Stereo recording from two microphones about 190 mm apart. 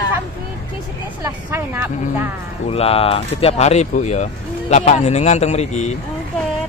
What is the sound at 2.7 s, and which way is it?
Speech, 30° left (ahead or behind).